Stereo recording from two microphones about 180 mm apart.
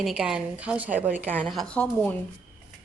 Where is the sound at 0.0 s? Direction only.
5° right (ahead or behind).